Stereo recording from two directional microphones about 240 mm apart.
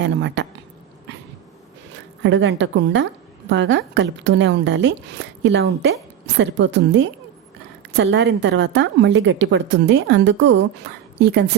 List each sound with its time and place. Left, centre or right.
0.0 s a woman's voice: right
1.9 s a woman's voice: right